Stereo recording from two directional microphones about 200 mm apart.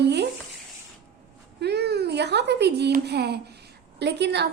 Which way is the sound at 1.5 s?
55° right (ahead or behind).